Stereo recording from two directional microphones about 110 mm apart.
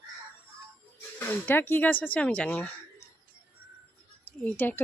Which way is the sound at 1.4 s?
20° left (ahead or behind).